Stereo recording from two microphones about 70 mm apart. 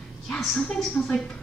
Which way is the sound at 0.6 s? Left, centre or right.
Centre.